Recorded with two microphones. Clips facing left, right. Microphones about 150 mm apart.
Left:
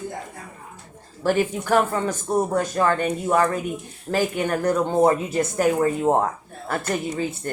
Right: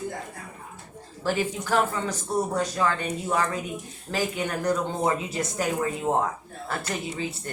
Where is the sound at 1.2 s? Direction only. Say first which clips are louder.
Left 5 dB; 55° left (ahead or behind).